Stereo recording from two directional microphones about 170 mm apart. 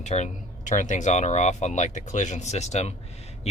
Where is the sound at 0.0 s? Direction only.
45° left (ahead or behind).